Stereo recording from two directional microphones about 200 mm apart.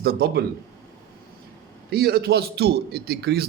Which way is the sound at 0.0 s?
50° right (ahead or behind).